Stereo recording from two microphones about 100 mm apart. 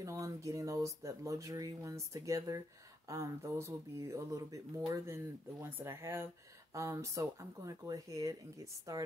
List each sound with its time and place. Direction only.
0.0 s speech: 30° right (ahead or behind)